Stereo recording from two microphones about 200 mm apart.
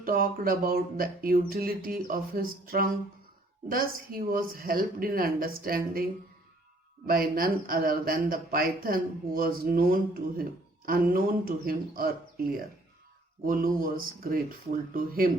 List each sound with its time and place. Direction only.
0.0 s speech: 45° right (ahead or behind)